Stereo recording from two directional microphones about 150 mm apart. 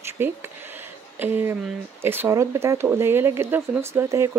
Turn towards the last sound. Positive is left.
turn(degrees=-15)  # may be behind; listen again after turning